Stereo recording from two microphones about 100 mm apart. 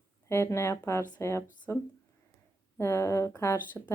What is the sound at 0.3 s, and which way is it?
Speech, 25° left (ahead or behind).